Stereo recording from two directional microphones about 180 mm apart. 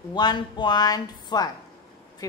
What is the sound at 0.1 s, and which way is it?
Speech, 25° left (ahead or behind).